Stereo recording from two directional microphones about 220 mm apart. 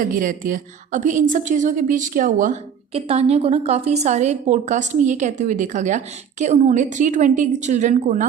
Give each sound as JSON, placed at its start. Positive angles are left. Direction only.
{"t": 0.0, "sound": "a woman's voice", "side_deg": -40}